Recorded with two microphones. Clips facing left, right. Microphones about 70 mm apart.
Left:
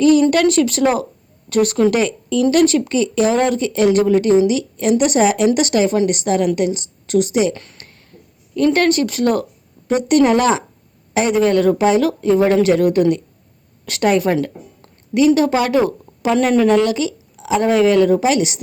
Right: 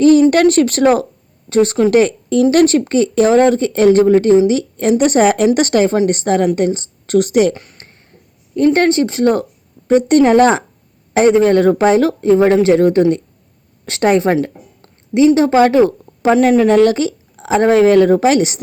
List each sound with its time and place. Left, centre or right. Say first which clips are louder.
0.3 s speech: right 4 dB; right
1.5 s speech: right 2 dB; right
7.5 s speech: even; centre
8.5 s a woman's voice: right 3 dB; right
15.4 s speech: right 5 dB; right